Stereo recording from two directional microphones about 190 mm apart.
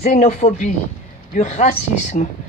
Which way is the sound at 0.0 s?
35° left (ahead or behind).